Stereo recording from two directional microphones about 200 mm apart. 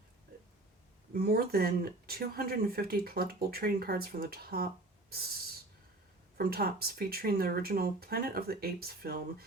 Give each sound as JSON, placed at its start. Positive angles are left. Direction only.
{"t": 1.1, "sound": "speech", "side_deg": -50}
{"t": 6.3, "sound": "speech", "side_deg": -50}